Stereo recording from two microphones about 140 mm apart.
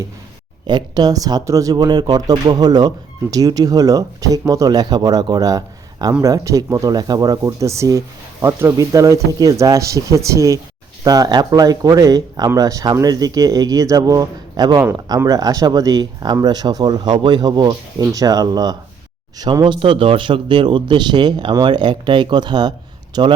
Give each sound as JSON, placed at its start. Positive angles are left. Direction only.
{"t": 0.7, "sound": "speech", "side_deg": -30}